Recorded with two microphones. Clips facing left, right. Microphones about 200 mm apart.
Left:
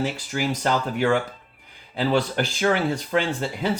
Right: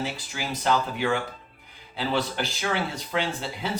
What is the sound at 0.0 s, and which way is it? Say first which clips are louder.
Speech: left 7 dB; 50° left (ahead or behind).